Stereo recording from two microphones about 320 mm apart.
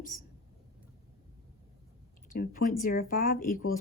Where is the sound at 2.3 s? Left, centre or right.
Left.